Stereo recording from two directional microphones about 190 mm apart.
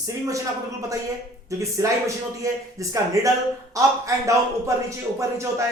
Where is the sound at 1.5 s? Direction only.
15° right (ahead or behind).